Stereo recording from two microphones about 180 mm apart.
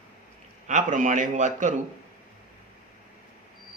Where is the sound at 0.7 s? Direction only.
45° right (ahead or behind).